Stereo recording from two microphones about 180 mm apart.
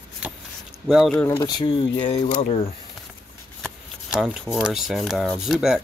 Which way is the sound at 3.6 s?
Centre (ahead or behind).